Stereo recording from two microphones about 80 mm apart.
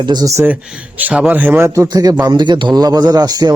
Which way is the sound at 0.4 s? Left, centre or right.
Right.